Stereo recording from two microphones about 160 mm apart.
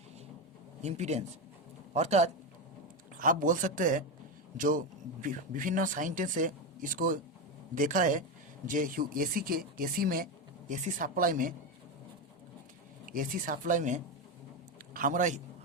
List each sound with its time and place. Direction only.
0.8 s a man's voice: 45° right (ahead or behind)
3.2 s speech: 55° right (ahead or behind)
10.7 s speech: 50° right (ahead or behind)
13.1 s a man's voice: 60° right (ahead or behind)